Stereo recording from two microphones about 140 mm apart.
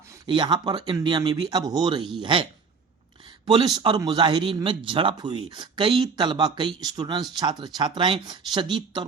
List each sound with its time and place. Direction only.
0.3 s speech: 35° right (ahead or behind)